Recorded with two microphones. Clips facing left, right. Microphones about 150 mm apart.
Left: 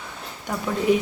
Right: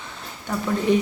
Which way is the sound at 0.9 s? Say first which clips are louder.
Even; 10° left (ahead or behind).